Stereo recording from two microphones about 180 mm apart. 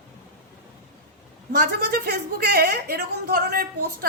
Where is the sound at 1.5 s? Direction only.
60° right (ahead or behind).